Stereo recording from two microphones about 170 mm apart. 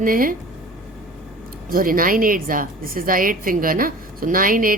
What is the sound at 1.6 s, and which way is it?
A woman's voice, 55° right (ahead or behind).